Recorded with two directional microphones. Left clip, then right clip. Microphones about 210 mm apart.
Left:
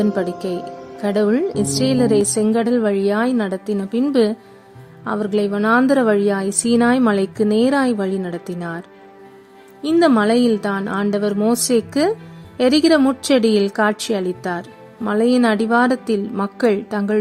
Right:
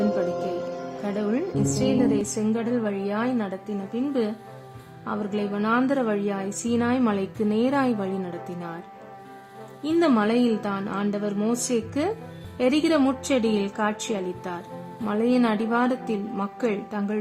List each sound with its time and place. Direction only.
1.0 s a woman's voice: 35° left (ahead or behind)
5.0 s a woman's voice: 35° left (ahead or behind)
9.8 s a woman's voice: 30° left (ahead or behind)